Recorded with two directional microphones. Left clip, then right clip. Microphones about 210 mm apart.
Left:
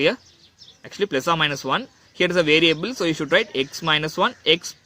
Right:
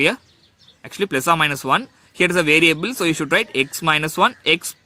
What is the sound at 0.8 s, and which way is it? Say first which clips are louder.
Speech: right 2 dB; 30° right (ahead or behind).